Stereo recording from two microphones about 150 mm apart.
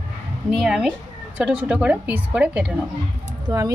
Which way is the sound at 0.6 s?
5° right (ahead or behind).